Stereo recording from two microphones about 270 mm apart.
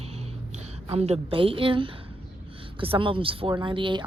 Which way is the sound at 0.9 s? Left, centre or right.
Right.